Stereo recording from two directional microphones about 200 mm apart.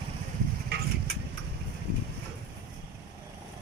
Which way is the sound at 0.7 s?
55° right (ahead or behind).